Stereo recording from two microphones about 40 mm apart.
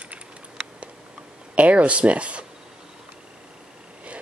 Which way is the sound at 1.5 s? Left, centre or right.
Right.